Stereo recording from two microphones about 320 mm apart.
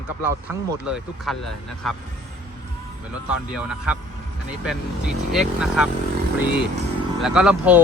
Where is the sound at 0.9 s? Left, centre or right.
Centre.